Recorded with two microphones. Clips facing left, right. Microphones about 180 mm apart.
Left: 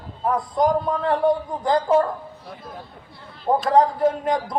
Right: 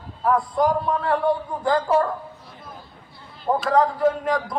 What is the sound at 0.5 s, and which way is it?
Speech, 20° left (ahead or behind).